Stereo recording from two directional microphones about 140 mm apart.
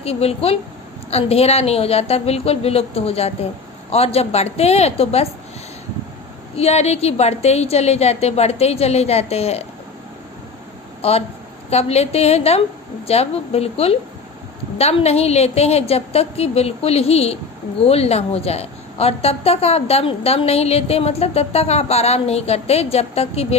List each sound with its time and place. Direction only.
0.0 s a woman's voice: 45° left (ahead or behind)
6.6 s a woman's voice: 50° left (ahead or behind)
11.0 s a woman's voice: 45° left (ahead or behind)